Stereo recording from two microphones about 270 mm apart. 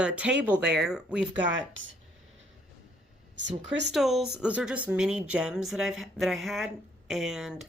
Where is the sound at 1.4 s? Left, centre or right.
Right.